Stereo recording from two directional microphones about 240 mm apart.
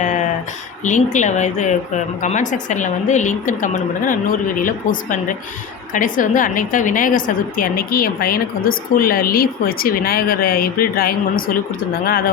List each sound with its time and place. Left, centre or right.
0.9 s a woman's voice: left